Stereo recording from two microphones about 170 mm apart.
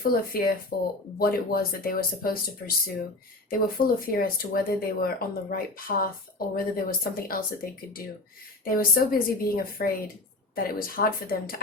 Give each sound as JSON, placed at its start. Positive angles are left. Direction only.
{"t": 0.0, "sound": "speech", "side_deg": 60}
{"t": 0.7, "sound": "speech", "side_deg": 70}
{"t": 1.2, "sound": "speech", "side_deg": 60}